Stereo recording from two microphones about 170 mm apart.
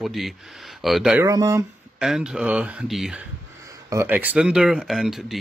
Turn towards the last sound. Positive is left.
turn(degrees=0)  # may be behind; listen again after turning